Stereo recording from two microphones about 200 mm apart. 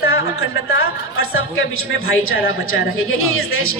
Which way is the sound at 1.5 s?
90° left.